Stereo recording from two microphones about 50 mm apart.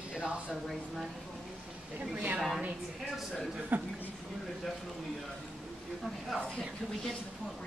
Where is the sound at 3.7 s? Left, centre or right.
Right.